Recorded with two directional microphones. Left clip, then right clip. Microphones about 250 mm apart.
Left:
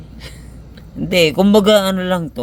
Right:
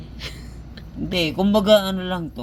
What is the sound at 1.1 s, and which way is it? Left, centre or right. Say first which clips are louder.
Speech: left 8 dB; left.